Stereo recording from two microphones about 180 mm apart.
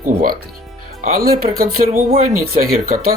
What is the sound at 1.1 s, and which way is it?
Speech, 55° right (ahead or behind).